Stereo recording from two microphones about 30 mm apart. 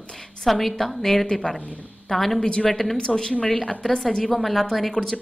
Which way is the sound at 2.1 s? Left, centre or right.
Centre.